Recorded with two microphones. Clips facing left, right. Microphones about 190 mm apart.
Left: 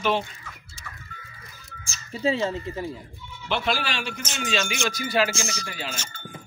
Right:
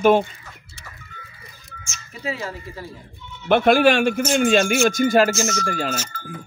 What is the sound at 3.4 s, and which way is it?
Speech, 55° right (ahead or behind).